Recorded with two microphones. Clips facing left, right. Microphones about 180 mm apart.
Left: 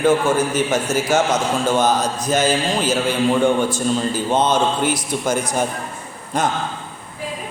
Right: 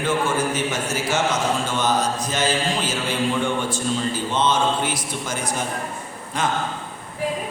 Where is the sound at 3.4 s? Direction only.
40° left (ahead or behind).